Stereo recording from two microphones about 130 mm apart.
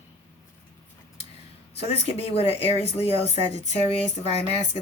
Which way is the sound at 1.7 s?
50° left (ahead or behind).